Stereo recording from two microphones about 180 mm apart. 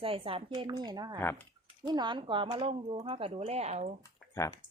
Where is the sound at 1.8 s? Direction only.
25° right (ahead or behind).